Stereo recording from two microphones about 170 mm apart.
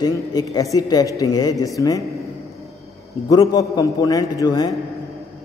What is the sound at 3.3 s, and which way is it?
A man's voice, 20° left (ahead or behind).